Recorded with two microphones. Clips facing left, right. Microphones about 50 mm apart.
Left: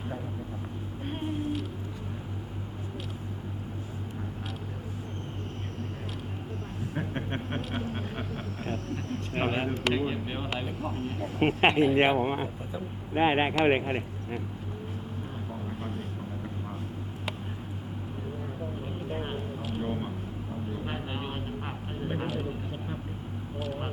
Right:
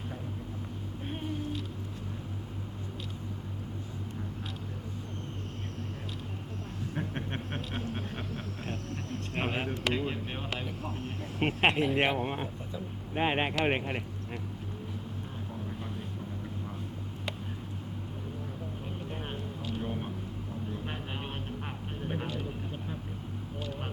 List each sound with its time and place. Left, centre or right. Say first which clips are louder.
1.0 s vehicle: left 4 dB; centre
6.9 s a sound: left 3 dB; centre
9.8 s speech: left 3 dB; centre
15.8 s vehicle: left 3 dB; centre
19.1 s a sound: left 5 dB; centre
23.6 s vehicle: left 5 dB; centre